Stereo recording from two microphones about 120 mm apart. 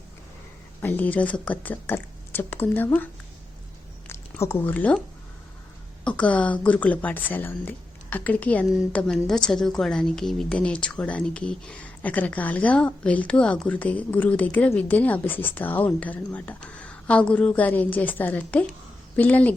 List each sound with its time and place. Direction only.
0.8 s a woman's voice: 15° left (ahead or behind)
4.0 s a sound: 20° left (ahead or behind)
6.1 s a woman's voice: 10° left (ahead or behind)